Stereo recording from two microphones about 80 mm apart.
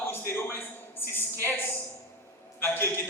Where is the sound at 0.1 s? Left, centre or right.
Left.